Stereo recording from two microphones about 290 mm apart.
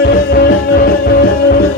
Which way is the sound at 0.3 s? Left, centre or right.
Left.